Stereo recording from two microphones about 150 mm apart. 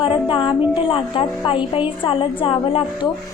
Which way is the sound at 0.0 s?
35° left (ahead or behind).